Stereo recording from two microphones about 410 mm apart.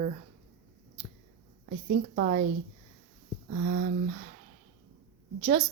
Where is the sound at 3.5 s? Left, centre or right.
Right.